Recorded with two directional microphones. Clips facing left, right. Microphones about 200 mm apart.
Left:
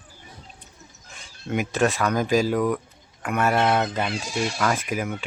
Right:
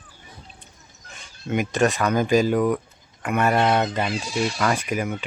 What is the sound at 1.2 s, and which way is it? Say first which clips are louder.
Speech: right 2 dB; centre (ahead or behind).